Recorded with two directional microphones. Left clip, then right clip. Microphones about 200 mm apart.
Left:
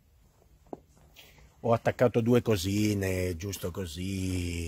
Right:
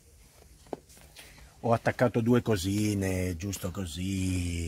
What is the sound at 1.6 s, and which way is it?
Speech, 50° left (ahead or behind).